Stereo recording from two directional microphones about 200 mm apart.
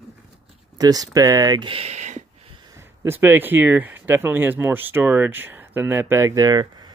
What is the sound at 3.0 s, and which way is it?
Speech, 10° right (ahead or behind).